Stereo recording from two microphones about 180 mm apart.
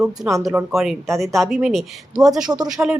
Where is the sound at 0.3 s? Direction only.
15° right (ahead or behind).